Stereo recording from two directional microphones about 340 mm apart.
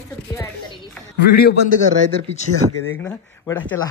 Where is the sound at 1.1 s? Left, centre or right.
Left.